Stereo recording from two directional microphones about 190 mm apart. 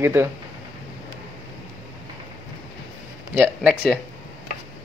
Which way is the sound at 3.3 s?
10° right (ahead or behind).